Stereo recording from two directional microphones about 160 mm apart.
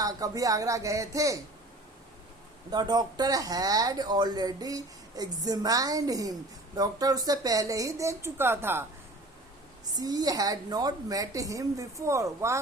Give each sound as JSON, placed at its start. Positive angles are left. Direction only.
{"t": 0.0, "sound": "speech", "side_deg": -20}
{"t": 2.6, "sound": "speech", "side_deg": -25}
{"t": 9.9, "sound": "speech", "side_deg": -25}